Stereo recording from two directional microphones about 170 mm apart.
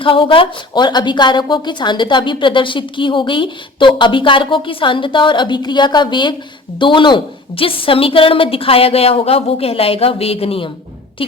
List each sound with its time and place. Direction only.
0.0 s a woman's voice: 30° left (ahead or behind)